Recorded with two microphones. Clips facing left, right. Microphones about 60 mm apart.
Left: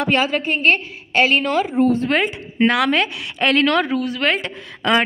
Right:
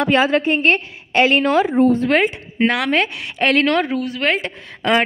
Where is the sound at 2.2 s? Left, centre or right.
Right.